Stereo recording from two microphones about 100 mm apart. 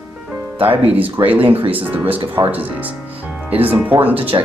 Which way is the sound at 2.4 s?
35° right (ahead or behind).